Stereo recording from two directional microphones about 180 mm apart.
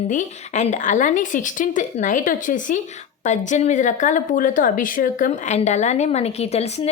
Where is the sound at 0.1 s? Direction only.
40° left (ahead or behind).